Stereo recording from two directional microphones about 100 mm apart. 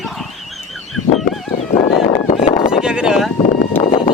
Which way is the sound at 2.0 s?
70° left (ahead or behind).